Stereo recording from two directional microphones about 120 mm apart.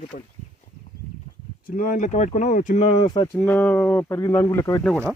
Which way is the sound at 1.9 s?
85° left.